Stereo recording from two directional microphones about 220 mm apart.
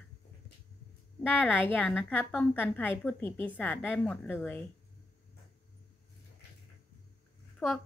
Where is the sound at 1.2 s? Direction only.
10° left (ahead or behind).